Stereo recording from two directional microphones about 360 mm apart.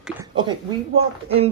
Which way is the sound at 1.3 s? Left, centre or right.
Centre.